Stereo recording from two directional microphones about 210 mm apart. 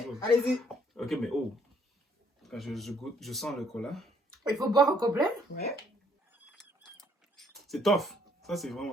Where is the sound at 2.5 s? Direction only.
Centre (ahead or behind).